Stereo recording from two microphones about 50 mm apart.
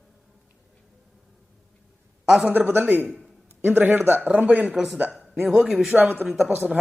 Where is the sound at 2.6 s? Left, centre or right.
Right.